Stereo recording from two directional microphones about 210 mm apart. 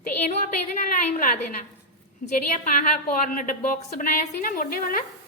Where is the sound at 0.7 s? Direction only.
40° left (ahead or behind).